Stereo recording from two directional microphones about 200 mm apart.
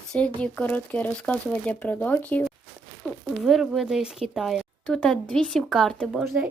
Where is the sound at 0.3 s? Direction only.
5° left (ahead or behind).